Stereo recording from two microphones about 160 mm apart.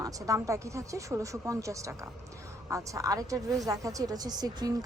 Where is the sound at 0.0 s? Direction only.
20° right (ahead or behind).